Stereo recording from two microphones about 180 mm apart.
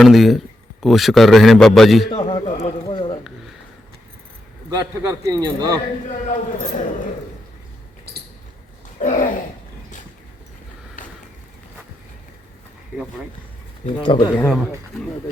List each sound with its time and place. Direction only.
0.0 s a man's voice: centre (ahead or behind)
2.0 s a sound: 25° left (ahead or behind)
4.7 s a man's voice: 20° right (ahead or behind)
9.0 s speech: 45° left (ahead or behind)
14.0 s speech: 25° left (ahead or behind)
14.3 s speech: 5° left (ahead or behind)